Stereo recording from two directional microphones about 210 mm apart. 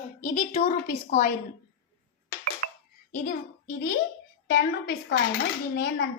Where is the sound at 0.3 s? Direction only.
40° left (ahead or behind).